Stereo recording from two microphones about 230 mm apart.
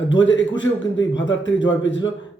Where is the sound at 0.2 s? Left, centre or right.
Left.